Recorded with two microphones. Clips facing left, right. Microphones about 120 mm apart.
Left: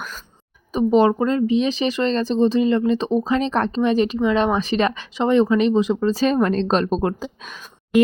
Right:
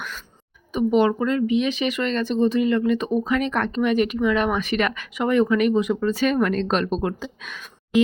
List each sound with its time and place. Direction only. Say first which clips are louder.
0.7 s speech: left 3 dB; 35° left (ahead or behind)